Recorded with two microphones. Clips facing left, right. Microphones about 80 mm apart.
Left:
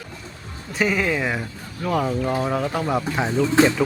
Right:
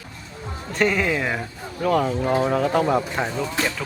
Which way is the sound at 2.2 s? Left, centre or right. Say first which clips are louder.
Right 2 dB; centre.